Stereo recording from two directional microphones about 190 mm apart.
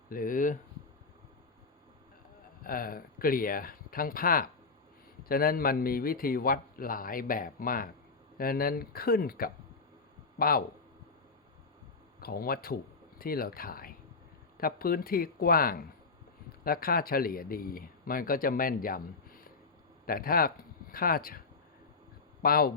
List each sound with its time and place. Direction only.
0.1 s speech: 45° left (ahead or behind)
2.6 s speech: 50° left (ahead or behind)
12.2 s speech: 50° left (ahead or behind)
22.4 s speech: 50° left (ahead or behind)